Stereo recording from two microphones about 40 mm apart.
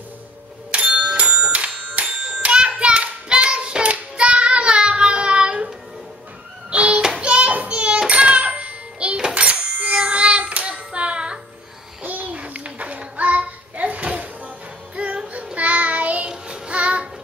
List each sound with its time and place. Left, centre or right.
0.7 s a sound: right
1.3 s hands: right
3.9 s child singing: right
6.7 s hands: right
7.2 s a sound: right
8.1 s music: right
9.3 s cash register: right
9.9 s child singing: right
12.0 s a sound: right
12.3 s children playing: right
15.0 s music: right
15.5 s child singing: right
16.3 s child singing: right